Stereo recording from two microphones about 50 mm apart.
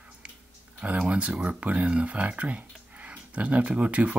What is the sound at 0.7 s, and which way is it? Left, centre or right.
Speech, right.